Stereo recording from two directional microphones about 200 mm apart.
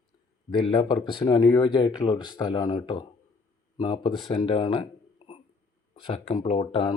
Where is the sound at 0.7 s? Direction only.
25° left (ahead or behind).